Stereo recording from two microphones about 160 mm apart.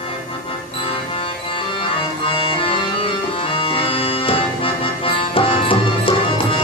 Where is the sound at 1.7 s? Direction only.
35° left (ahead or behind).